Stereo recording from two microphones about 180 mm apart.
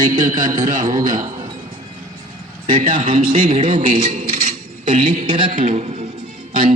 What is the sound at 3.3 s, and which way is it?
Speech, 30° right (ahead or behind).